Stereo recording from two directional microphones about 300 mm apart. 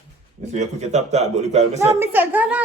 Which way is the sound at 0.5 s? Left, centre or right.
Right.